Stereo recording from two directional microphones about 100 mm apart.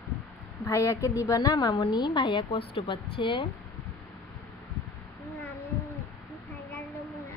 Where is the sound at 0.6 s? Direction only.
30° left (ahead or behind); by 3.5 s 55° left (ahead or behind).